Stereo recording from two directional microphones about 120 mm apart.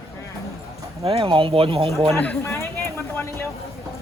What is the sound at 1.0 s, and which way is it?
Speech, 50° right (ahead or behind).